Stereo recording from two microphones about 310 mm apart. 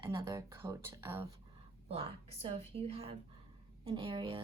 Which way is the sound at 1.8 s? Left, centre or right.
Centre.